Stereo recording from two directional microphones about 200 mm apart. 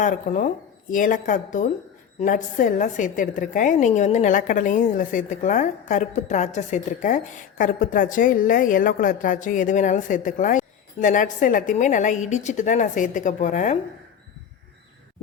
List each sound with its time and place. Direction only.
0.0 s a woman's voice: 40° left (ahead or behind)